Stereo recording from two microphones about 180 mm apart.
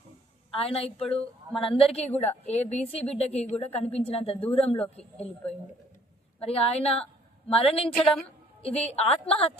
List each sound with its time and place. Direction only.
0.5 s a woman's voice: 35° left (ahead or behind)
4.8 s speech: 5° left (ahead or behind)
6.4 s a woman's voice: 35° left (ahead or behind)
7.9 s a woman's voice: centre (ahead or behind)
8.6 s a woman's voice: 35° left (ahead or behind)